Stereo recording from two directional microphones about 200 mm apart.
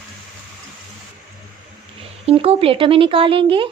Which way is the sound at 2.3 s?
30° right (ahead or behind).